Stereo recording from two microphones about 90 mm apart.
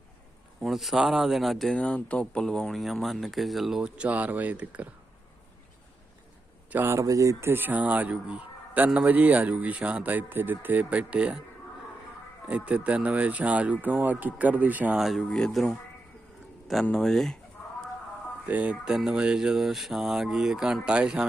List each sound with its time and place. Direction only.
0.6 s speech: centre (ahead or behind)
6.8 s speech: 35° right (ahead or behind); by 11.4 s 10° right (ahead or behind)
12.5 s speech: 15° right (ahead or behind)
14.9 s speech: 5° right (ahead or behind)
15.3 s speech: 10° left (ahead or behind)
16.9 s speech: 5° left (ahead or behind)
18.4 s speech: 15° right (ahead or behind)